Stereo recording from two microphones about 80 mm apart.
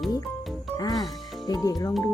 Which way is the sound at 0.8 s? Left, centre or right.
Left.